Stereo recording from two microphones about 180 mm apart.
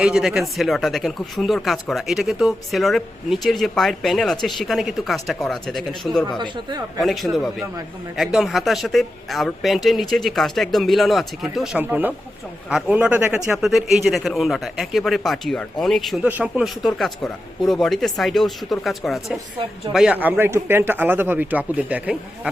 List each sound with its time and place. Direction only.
0.0 s speech: 5° right (ahead or behind)
6.4 s speech: 25° right (ahead or behind)
7.0 s speech: centre (ahead or behind)